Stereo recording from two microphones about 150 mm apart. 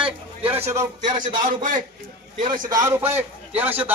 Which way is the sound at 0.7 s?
20° right (ahead or behind).